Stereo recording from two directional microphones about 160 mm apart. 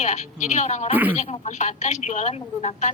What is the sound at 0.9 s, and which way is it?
Speech, 10° right (ahead or behind).